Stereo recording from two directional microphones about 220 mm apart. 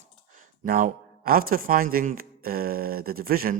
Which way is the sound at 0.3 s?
40° right (ahead or behind).